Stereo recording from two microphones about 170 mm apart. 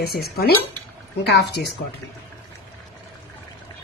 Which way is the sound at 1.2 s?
75° left (ahead or behind).